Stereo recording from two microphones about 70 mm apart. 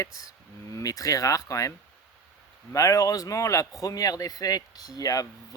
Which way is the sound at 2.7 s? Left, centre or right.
Left.